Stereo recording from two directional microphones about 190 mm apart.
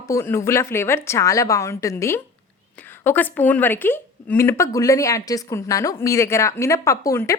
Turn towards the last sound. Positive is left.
turn(degrees=15)  # may be behind; listen again after turning